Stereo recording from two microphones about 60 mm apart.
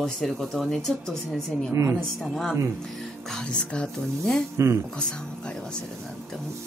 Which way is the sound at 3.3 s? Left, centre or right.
Centre.